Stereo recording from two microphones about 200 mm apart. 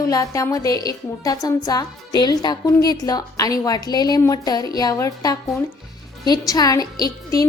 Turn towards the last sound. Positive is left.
turn(degrees=20)  # may be behind; listen again after turning